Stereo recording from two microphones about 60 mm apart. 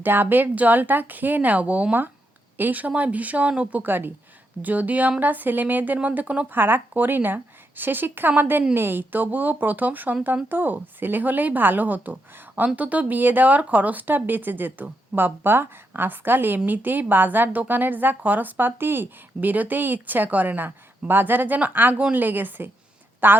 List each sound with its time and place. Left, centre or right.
0.0 s a woman's voice: right
6.5 s a woman's voice: right